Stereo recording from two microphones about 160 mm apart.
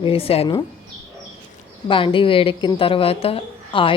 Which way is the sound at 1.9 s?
35° left (ahead or behind).